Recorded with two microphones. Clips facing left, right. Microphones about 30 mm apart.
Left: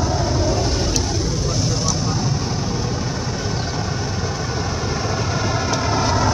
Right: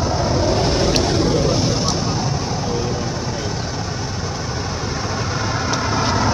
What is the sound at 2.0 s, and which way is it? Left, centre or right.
Vehicle, centre.